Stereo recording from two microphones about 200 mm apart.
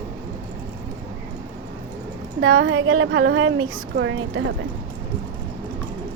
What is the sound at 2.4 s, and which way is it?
Speech, 80° right.